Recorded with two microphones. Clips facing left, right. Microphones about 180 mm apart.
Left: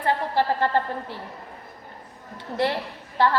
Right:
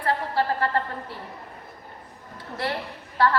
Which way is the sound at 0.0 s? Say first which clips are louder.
Left 2 dB; 25° left (ahead or behind).